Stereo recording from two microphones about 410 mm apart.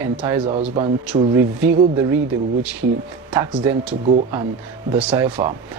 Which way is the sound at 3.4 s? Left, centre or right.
Centre.